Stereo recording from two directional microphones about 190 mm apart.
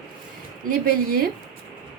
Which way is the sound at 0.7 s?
50° right (ahead or behind).